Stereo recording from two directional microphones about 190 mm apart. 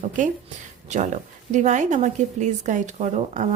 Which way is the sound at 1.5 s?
40° right (ahead or behind).